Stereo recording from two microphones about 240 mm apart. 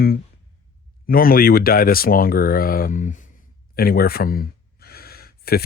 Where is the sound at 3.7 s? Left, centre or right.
Left.